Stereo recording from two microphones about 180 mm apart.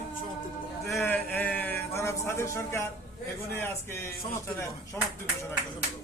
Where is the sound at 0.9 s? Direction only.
10° left (ahead or behind).